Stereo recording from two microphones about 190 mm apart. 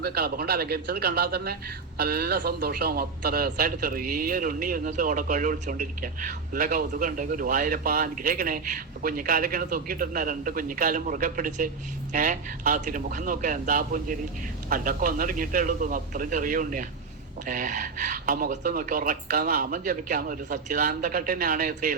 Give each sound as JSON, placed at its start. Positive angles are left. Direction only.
{"t": 0.0, "sound": "a man's voice", "side_deg": -55}